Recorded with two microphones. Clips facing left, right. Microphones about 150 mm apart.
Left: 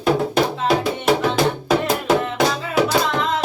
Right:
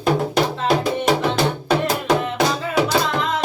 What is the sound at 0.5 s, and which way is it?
Music, centre (ahead or behind).